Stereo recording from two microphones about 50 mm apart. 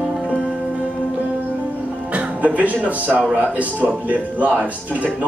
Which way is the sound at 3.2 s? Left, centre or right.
Right.